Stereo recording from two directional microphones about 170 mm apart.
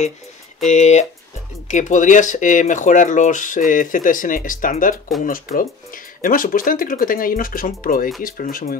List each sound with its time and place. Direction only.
0.7 s speech: 45° left (ahead or behind)